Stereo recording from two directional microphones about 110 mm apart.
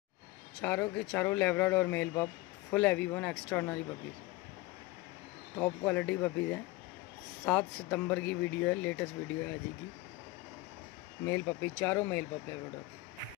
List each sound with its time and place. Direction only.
0.6 s speech: 15° left (ahead or behind)
5.6 s speech: 15° left (ahead or behind)
11.2 s speech: 20° left (ahead or behind)